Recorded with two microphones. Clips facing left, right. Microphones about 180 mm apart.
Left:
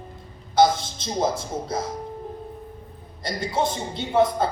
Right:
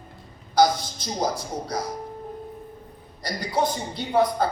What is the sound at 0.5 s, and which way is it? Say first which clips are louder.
A man's voice: left 1 dB; 25° left (ahead or behind).